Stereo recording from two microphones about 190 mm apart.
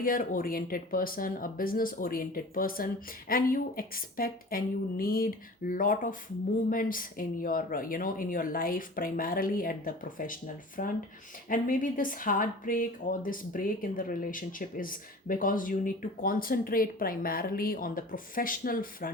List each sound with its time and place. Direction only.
0.0 s speech: 45° left (ahead or behind)